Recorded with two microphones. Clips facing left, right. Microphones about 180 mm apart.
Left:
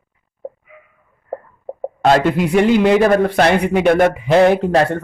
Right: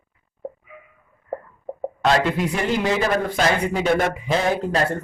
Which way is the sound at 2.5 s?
65° left (ahead or behind).